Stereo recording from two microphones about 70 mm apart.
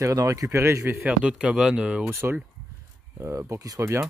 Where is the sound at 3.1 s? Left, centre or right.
Right.